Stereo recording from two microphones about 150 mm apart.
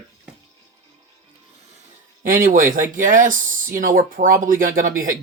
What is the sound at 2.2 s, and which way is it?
Speech, 65° right (ahead or behind).